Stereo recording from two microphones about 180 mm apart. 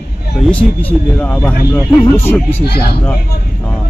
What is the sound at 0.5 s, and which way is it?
Speech, 5° left (ahead or behind).